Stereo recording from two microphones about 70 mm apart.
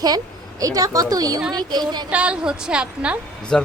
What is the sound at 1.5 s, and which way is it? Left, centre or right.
Speech, right.